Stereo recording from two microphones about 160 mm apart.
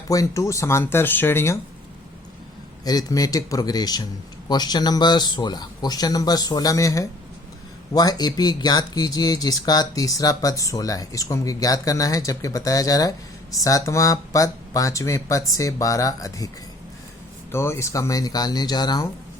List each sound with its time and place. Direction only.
0.1 s speech: 20° left (ahead or behind)
2.8 s speech: 25° left (ahead or behind)
17.5 s speech: 15° left (ahead or behind)